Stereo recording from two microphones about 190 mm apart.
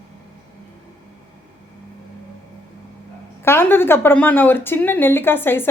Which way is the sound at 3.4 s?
10° left (ahead or behind).